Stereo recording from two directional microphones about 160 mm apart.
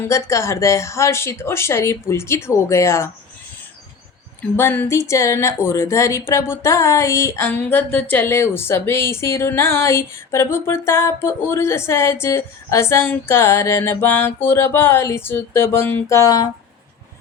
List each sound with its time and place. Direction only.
0.0 s a woman's voice: 20° left (ahead or behind)
4.5 s a woman's voice: 15° left (ahead or behind)